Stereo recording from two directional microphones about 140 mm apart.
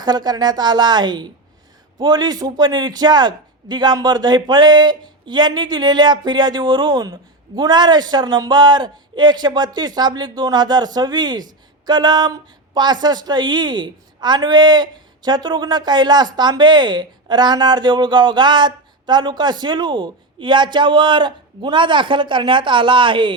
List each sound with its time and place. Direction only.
0.0 s speech: 30° right (ahead or behind)